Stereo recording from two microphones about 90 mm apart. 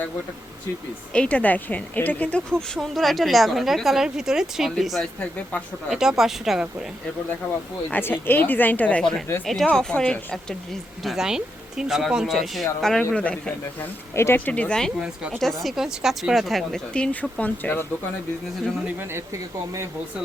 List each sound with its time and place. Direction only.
1.1 s speech: 15° left (ahead or behind)
5.2 s speech: 15° left (ahead or behind)
5.9 s speech: 5° right (ahead or behind)
7.9 s speech: 20° left (ahead or behind)
11.0 s speech: 5° right (ahead or behind)
14.2 s speech: 25° left (ahead or behind)